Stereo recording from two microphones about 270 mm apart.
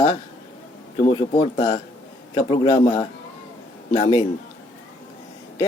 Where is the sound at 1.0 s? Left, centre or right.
Centre.